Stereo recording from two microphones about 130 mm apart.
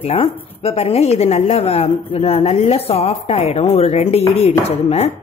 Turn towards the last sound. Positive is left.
turn(degrees=55)  # may be behind; listen again after turning